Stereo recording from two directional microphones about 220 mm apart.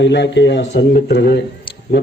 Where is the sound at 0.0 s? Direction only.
50° left (ahead or behind).